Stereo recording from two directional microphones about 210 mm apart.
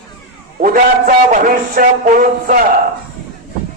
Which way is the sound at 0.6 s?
40° right (ahead or behind).